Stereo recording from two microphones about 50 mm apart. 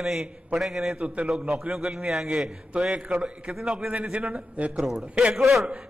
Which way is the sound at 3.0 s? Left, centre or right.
Right.